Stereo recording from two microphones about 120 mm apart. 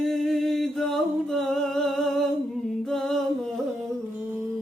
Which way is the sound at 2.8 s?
5° left (ahead or behind).